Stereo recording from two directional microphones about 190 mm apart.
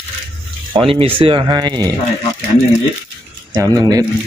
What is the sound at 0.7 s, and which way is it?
Speech, 25° right (ahead or behind).